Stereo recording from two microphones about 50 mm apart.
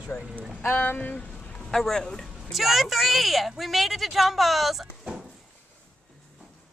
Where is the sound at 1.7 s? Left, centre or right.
Centre.